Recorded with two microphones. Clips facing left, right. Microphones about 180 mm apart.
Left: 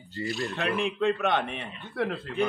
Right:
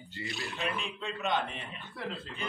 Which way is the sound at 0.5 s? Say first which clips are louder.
Left 7 dB; 65° left (ahead or behind).